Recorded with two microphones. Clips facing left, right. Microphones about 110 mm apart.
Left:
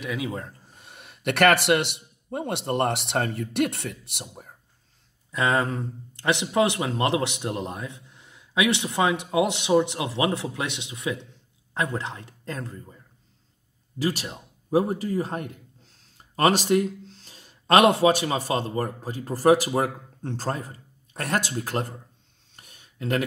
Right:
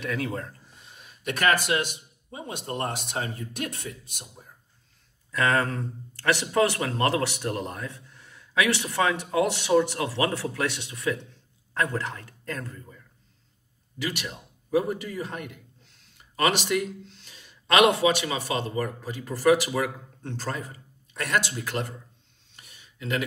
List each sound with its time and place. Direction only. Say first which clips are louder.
0.0 s a man's voice: even; 10° left (ahead or behind)
0.7 s speech: left 3 dB; 60° left (ahead or behind)
5.3 s a man's voice: left 1 dB; 20° left (ahead or behind); by 22.0 s 40° left (ahead or behind)
22.6 s a sound: left 4 dB; 45° left (ahead or behind)